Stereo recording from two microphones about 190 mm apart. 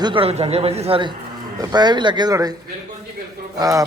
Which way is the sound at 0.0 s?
25° right (ahead or behind).